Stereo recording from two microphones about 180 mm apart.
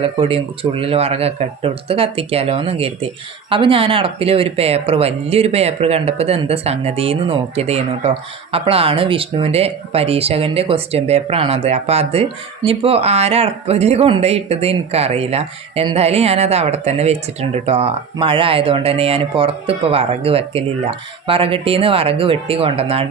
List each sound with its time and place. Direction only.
0.0 s speech: 30° right (ahead or behind)